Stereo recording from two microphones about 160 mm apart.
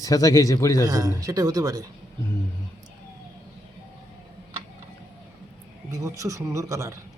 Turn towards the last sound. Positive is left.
turn(degrees=-20)  # may be behind; listen again after turning